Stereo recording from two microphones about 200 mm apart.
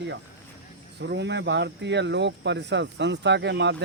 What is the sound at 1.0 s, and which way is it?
Speech, 60° right (ahead or behind).